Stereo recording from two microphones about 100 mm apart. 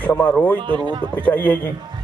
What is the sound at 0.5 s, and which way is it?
Speech, 50° right (ahead or behind).